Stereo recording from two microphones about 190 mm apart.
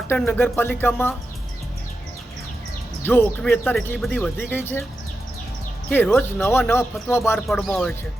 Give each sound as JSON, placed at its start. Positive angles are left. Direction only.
{"t": 0.1, "sound": "speech", "side_deg": 10}
{"t": 3.0, "sound": "speech", "side_deg": 10}
{"t": 5.9, "sound": "speech", "side_deg": 10}
{"t": 7.3, "sound": "speech", "side_deg": 0}